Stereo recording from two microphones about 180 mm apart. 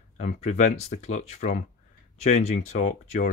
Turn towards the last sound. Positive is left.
turn(degrees=40)  # may be behind; listen again after turning